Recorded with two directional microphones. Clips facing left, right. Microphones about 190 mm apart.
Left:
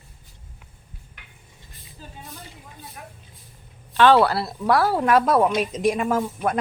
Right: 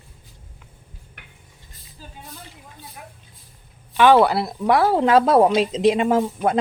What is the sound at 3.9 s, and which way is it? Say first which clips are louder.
Speech: right 2 dB; 15° right (ahead or behind).